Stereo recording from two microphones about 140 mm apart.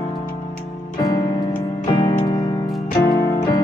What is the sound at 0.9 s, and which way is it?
Music, 25° left (ahead or behind).